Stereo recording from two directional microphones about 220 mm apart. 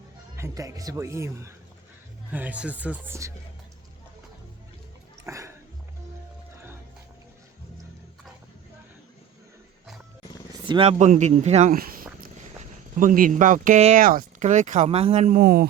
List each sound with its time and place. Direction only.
0.3 s speech: 15° right (ahead or behind)
5.2 s music: 10° right (ahead or behind)
10.5 s speech: 25° right (ahead or behind)
15.4 s speech: 40° right (ahead or behind)